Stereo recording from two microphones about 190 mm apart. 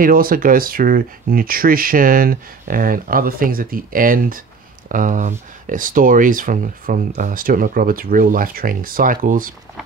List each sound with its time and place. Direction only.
0.0 s speech: 50° right (ahead or behind)